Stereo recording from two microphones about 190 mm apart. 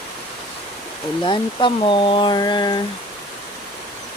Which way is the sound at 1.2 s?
25° left (ahead or behind).